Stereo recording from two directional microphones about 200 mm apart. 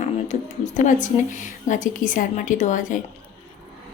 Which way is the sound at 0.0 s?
35° left (ahead or behind).